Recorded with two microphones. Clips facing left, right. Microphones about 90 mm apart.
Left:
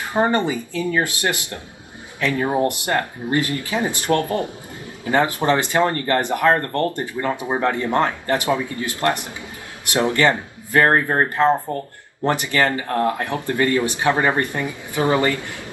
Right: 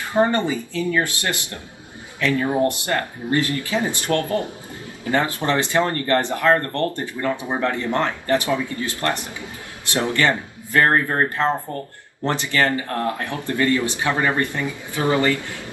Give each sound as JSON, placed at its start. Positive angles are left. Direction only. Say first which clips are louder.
{"t": 0.1, "sound": "speech", "louder": "even", "side_deg": 20}